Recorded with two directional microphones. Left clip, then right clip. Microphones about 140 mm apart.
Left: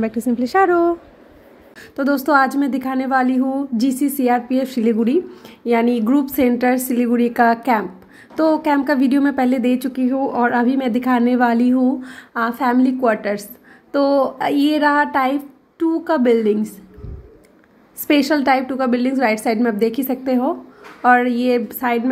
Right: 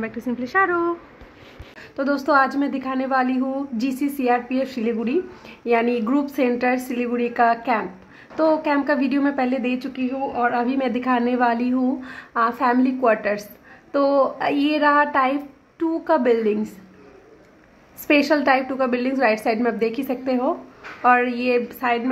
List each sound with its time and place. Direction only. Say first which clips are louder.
0.0 s a woman's voice: left 7 dB; 50° left (ahead or behind)
1.8 s a woman's voice: left 4 dB; 30° left (ahead or behind)
18.0 s a woman's voice: left 2 dB; 25° left (ahead or behind)